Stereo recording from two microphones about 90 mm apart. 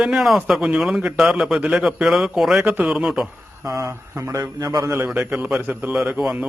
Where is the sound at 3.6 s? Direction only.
35° right (ahead or behind).